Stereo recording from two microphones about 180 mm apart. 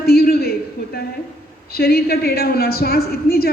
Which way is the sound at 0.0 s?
60° left (ahead or behind).